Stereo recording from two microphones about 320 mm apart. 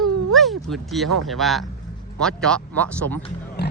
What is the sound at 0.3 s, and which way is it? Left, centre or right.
Speech, centre.